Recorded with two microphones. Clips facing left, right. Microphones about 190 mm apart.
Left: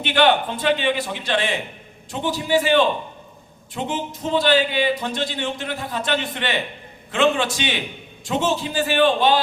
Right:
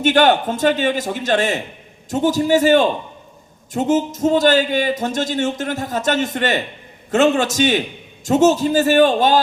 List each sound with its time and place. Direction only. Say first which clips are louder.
0.0 s a man's voice: right 4 dB; 45° right (ahead or behind)